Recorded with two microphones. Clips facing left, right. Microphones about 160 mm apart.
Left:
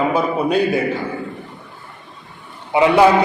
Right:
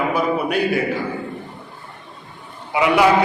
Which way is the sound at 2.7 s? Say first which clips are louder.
Left 4 dB; 30° left (ahead or behind).